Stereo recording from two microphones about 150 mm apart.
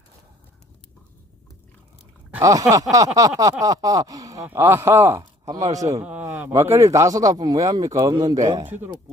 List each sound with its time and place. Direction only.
2.4 s speech: 20° right (ahead or behind)
5.2 s a sound: 25° right (ahead or behind)
5.7 s speech: 20° right (ahead or behind)
6.1 s a man's voice: 10° right (ahead or behind); by 8.6 s 25° right (ahead or behind)
8.6 s speech: 15° right (ahead or behind)